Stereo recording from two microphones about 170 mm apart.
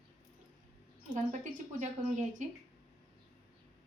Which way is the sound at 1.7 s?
45° right (ahead or behind).